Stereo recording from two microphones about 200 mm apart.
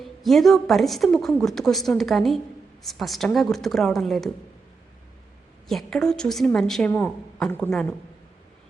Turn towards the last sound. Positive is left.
turn(degrees=5)  # may be behind; listen again after turning